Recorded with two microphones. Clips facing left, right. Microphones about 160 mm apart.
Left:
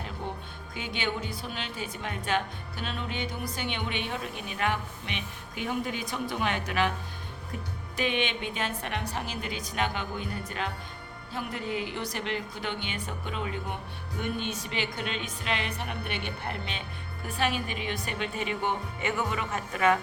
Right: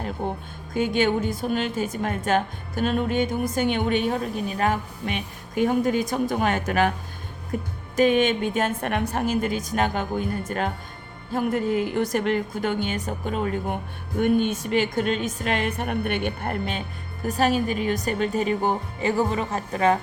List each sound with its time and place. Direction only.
0.0 s a woman's voice: 40° right (ahead or behind)